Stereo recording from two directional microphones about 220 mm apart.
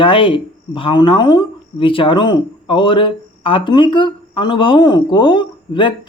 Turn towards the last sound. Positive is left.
turn(degrees=20)  # may be behind; listen again after turning